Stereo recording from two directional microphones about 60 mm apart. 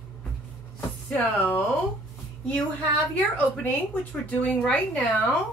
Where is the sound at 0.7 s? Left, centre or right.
Left.